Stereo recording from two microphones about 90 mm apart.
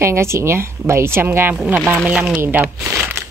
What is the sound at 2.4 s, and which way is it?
Speech, 20° right (ahead or behind).